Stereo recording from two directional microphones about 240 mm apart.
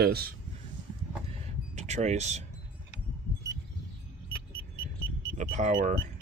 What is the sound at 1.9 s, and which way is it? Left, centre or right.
Speech, right.